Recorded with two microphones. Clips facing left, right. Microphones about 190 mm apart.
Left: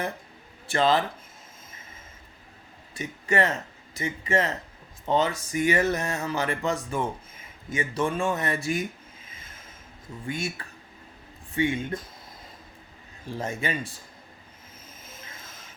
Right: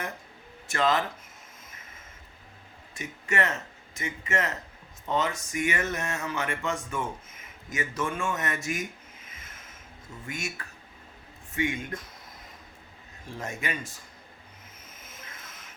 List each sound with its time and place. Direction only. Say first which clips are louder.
0.7 s speech: left 3 dB; 30° left (ahead or behind)
2.9 s speech: left 5 dB; 35° left (ahead or behind)
9.3 s a sound: left 1 dB; 30° left (ahead or behind)
10.2 s speech: left 5 dB; 30° left (ahead or behind)
13.3 s speech: left 4 dB; 30° left (ahead or behind)
15.0 s vehicle: left 1 dB; 30° left (ahead or behind)